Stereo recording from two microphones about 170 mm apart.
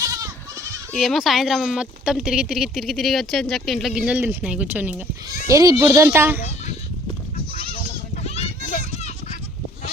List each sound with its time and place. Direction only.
0.0 s goat: 20° right (ahead or behind)
0.9 s speech: centre (ahead or behind)
8.1 s children playing: 40° left (ahead or behind)